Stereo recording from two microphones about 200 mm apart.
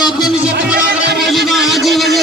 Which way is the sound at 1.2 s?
Centre (ahead or behind).